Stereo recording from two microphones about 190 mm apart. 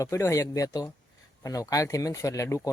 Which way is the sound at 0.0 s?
15° left (ahead or behind).